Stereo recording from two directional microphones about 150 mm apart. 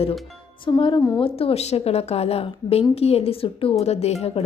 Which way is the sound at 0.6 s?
35° left (ahead or behind).